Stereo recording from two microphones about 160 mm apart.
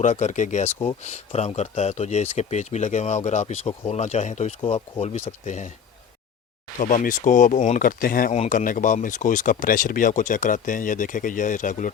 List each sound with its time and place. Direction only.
0.0 s speech: 50° left (ahead or behind)
6.7 s speech: 50° left (ahead or behind)
8.3 s speech: 50° left (ahead or behind)